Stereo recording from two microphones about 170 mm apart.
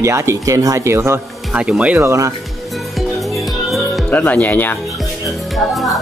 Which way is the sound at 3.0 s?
Centre (ahead or behind).